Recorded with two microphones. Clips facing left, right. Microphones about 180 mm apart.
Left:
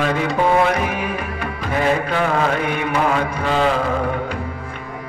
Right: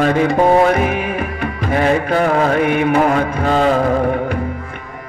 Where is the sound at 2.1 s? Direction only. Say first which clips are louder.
Right 4 dB; 40° right (ahead or behind).